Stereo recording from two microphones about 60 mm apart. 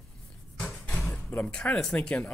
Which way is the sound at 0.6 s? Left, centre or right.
Left.